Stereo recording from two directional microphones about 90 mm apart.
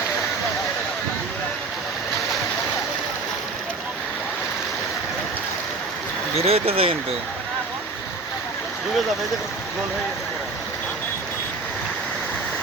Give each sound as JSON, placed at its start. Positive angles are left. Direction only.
{"t": 6.3, "sound": "speech", "side_deg": -90}